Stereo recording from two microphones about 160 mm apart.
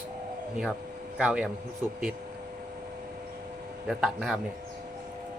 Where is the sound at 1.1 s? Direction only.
5° right (ahead or behind).